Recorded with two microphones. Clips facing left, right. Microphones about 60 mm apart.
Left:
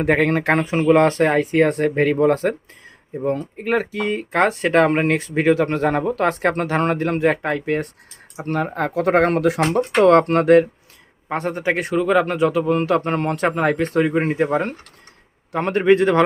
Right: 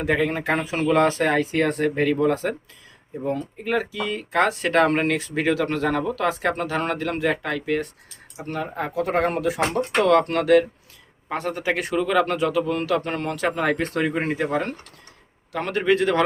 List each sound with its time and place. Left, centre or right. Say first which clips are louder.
0.0 s speech: left 5 dB; left
0.8 s speech: left 5 dB; left
1.0 s speech: left 4 dB; left
1.3 s speech: left 4 dB; left
1.6 s speech: left 4 dB; left
6.2 s speech: left 4 dB; left
8.4 s speech: left 6 dB; left
8.7 s speech: left 5 dB; left
10.0 s speech: left 5 dB; left
13.9 s speech: left 5 dB; left